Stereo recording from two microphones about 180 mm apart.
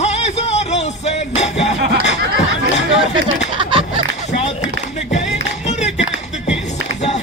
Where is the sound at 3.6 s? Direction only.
30° right (ahead or behind).